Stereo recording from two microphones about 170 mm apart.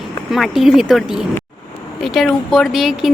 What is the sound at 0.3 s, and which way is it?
A woman's voice, centre (ahead or behind).